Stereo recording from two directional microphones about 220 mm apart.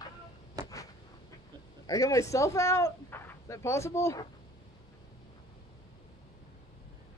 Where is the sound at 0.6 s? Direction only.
15° right (ahead or behind).